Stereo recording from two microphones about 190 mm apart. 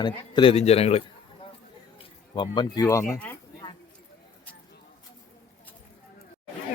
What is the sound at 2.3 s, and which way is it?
Speech, 25° left (ahead or behind).